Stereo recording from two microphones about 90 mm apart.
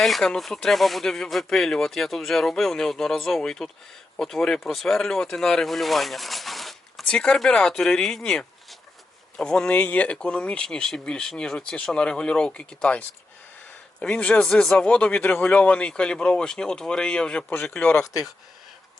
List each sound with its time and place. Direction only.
0.0 s speech: 5° left (ahead or behind)
17.9 s speech: 40° left (ahead or behind)